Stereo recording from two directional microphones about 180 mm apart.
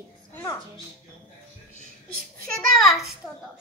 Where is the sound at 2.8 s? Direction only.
Centre (ahead or behind).